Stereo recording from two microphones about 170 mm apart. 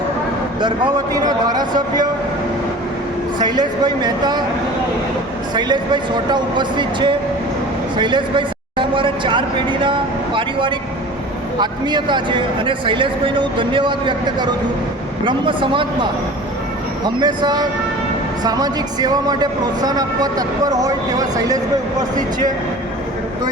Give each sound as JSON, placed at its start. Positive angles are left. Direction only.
{"t": 1.1, "sound": "speech", "side_deg": -25}
{"t": 3.3, "sound": "speech", "side_deg": -25}
{"t": 5.5, "sound": "speech", "side_deg": -25}
{"t": 17.2, "sound": "speech", "side_deg": -25}